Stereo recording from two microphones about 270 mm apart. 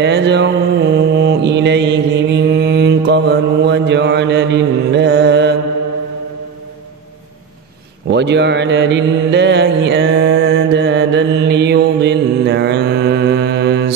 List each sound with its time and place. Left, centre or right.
0.0 s mantra: right
8.1 s mantra: right